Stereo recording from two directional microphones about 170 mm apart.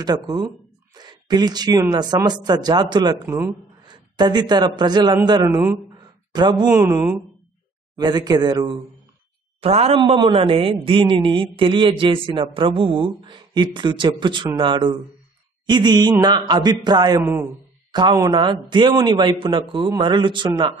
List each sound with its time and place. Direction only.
0.0 s a man's voice: 25° right (ahead or behind)
3.3 s speech: 15° right (ahead or behind)
3.8 s a man's voice: 25° right (ahead or behind)
5.9 s a sound: 25° right (ahead or behind)
6.7 s speech: 15° right (ahead or behind)
7.9 s a man's voice: 25° right (ahead or behind)
9.6 s a man's voice: 35° right (ahead or behind)
17.2 s a man's voice: 15° right (ahead or behind)